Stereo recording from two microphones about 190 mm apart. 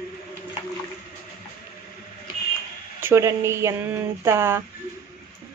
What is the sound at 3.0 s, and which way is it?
Speech, 15° right (ahead or behind).